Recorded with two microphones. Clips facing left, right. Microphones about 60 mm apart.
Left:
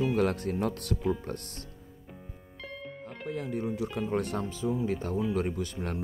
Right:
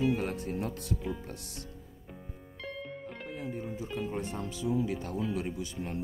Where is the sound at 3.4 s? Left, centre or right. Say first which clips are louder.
Left 6 dB; left.